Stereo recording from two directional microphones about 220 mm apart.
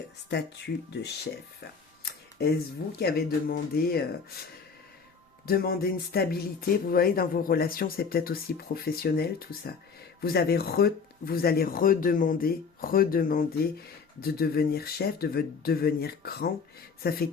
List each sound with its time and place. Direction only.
0.3 s speech: 50° left (ahead or behind)
3.0 s speech: 45° left (ahead or behind)
5.5 s speech: 40° left (ahead or behind)